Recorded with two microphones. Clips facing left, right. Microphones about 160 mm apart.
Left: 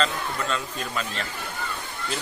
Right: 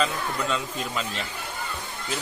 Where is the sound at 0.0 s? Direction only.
15° right (ahead or behind).